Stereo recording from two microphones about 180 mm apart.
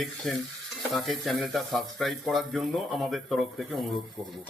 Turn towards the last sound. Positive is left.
turn(degrees=0)  # may be behind; listen again after turning